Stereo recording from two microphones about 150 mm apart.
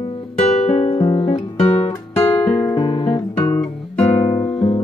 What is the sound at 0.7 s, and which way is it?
Music, 45° left (ahead or behind).